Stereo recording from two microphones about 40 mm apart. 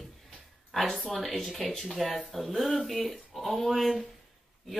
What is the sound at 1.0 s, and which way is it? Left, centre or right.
Speech, centre.